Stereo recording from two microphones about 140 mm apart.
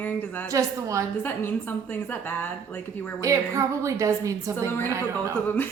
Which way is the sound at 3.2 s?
20° right (ahead or behind).